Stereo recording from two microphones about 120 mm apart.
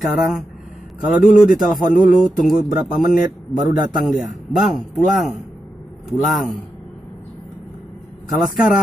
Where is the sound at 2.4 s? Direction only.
Centre (ahead or behind).